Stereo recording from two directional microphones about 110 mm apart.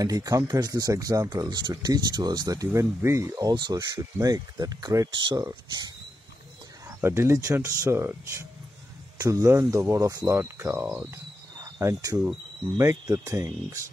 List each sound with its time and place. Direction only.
0.0 s speech: 30° right (ahead or behind)
6.9 s speech: 25° right (ahead or behind)
11.8 s speech: 30° right (ahead or behind)